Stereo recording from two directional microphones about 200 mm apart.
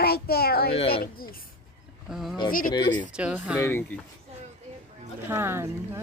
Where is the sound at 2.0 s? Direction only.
Centre (ahead or behind).